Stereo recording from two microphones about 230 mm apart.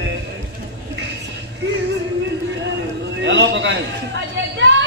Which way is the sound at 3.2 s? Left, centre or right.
Right.